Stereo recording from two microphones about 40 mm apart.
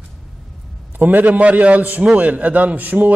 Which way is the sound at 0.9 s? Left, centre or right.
Right.